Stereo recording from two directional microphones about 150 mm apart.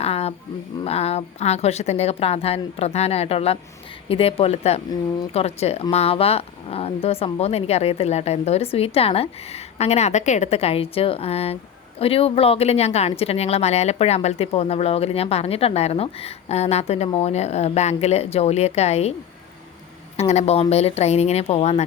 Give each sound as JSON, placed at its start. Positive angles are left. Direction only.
{"t": 0.0, "sound": "a sound", "side_deg": 45}
{"t": 0.9, "sound": "speech", "side_deg": 45}
{"t": 20.1, "sound": "speech", "side_deg": 45}